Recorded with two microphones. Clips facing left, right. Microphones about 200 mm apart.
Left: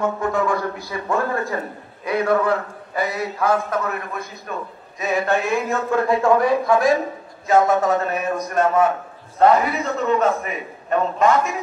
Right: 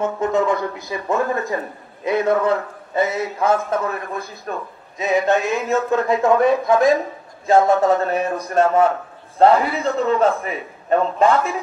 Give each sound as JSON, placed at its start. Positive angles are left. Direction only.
{"t": 0.2, "sound": "a man's voice", "side_deg": -20}
{"t": 4.9, "sound": "a man's voice", "side_deg": -20}